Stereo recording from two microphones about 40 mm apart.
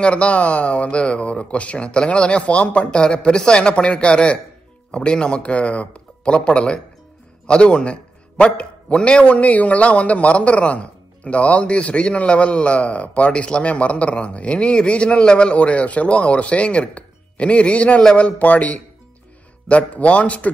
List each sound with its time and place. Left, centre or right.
0.0 s a man's voice: left